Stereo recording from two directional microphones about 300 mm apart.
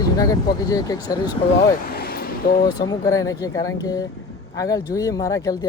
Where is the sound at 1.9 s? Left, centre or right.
Left.